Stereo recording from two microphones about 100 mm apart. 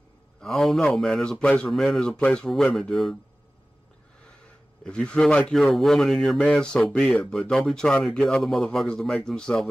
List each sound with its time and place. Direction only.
0.4 s speech: centre (ahead or behind)
4.8 s speech: 10° left (ahead or behind)